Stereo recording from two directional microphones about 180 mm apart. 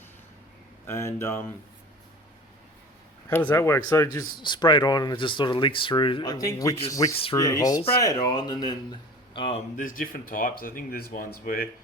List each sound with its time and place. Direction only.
0.9 s speech: 15° left (ahead or behind)
3.2 s a man's voice: 10° left (ahead or behind); by 9.6 s 30° left (ahead or behind)
9.7 s speech: 50° left (ahead or behind)